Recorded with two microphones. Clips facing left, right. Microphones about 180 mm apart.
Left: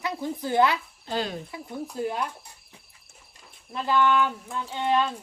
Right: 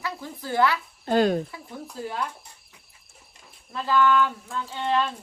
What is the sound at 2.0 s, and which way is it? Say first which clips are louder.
Speech: left 2 dB; 20° left (ahead or behind).